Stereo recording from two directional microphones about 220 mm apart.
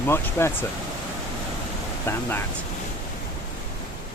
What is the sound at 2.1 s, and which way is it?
Speech, 10° left (ahead or behind).